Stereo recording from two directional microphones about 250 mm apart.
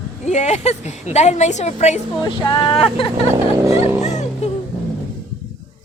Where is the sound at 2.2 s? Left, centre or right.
Centre.